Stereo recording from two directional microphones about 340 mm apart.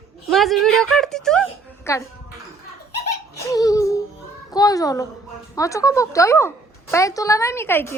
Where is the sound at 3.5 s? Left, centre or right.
Centre.